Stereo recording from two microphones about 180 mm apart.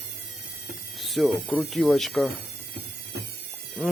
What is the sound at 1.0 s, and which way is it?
Speech, centre (ahead or behind).